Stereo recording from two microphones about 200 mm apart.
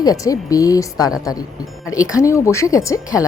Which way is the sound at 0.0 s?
20° left (ahead or behind).